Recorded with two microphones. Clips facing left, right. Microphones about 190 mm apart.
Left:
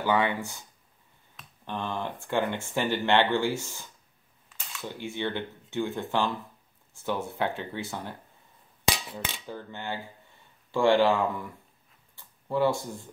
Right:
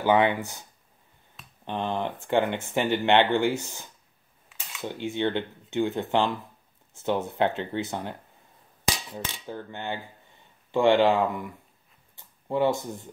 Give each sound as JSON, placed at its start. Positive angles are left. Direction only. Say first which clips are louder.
{"t": 0.0, "sound": "speech", "louder": "right 4 dB", "side_deg": -20}
{"t": 1.7, "sound": "speech", "louder": "right 4 dB", "side_deg": -20}
{"t": 4.5, "sound": "camera", "louder": "even", "side_deg": -5}
{"t": 4.8, "sound": "speech", "louder": "right 5 dB", "side_deg": -20}
{"t": 9.1, "sound": "cutlery", "louder": "right 2 dB", "side_deg": -15}
{"t": 10.7, "sound": "speech", "louder": "right 2 dB", "side_deg": -20}